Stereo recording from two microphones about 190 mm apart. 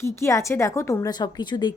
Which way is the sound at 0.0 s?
15° left (ahead or behind).